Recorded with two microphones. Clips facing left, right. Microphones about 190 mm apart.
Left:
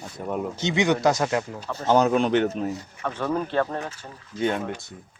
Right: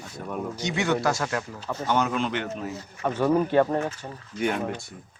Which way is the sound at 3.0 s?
10° right (ahead or behind).